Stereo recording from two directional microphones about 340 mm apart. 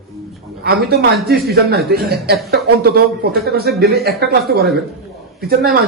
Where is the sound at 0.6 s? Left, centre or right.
Right.